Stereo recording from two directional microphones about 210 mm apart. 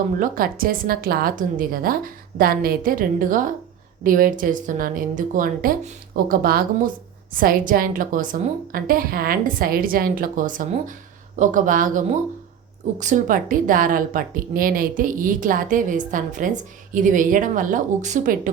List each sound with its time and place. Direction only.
0.2 s a woman's voice: 40° right (ahead or behind)